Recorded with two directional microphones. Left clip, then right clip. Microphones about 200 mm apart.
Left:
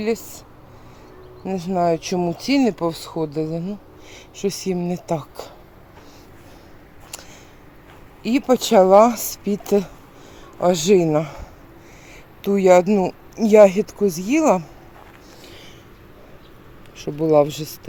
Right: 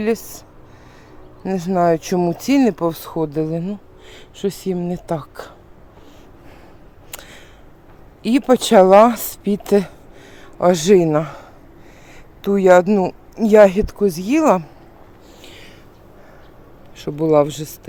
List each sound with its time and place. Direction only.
0.0 s speech: 15° right (ahead or behind)
1.5 s speech: 20° right (ahead or behind)
4.4 s speech: 5° right (ahead or behind)
7.1 s a sound: 20° right (ahead or behind)
8.2 s speech: 15° right (ahead or behind)
17.0 s speech: 10° right (ahead or behind)